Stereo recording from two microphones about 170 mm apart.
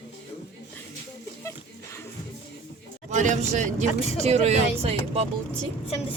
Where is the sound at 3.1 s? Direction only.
45° right (ahead or behind).